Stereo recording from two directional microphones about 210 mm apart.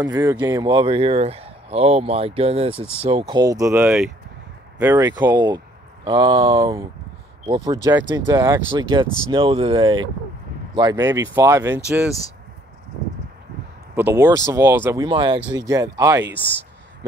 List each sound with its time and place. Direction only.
0.1 s speech: 20° right (ahead or behind)
6.5 s speech: 15° right (ahead or behind)
13.9 s speech: 10° right (ahead or behind)
15.0 s speech: 25° right (ahead or behind)